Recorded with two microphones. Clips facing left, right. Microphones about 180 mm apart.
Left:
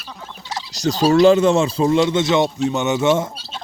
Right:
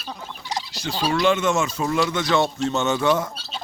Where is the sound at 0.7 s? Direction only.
40° left (ahead or behind).